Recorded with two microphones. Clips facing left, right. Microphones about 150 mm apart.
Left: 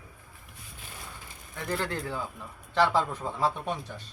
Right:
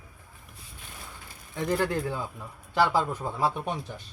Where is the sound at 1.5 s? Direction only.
15° right (ahead or behind).